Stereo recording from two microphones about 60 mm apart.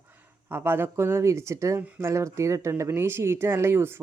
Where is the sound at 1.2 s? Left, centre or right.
Right.